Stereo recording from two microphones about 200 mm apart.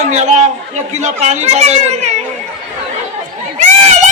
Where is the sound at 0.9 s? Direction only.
35° right (ahead or behind).